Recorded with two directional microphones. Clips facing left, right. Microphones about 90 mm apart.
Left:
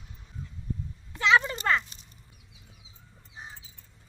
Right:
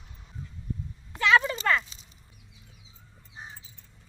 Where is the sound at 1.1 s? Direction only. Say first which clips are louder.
Right 1 dB; 25° left (ahead or behind).